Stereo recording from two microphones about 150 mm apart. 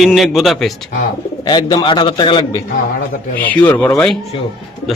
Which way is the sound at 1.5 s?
30° left (ahead or behind).